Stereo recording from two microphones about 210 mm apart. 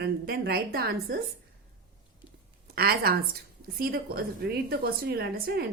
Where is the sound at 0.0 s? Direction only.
45° right (ahead or behind).